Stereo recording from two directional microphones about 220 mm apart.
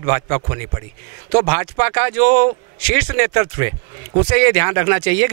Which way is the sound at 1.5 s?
15° right (ahead or behind).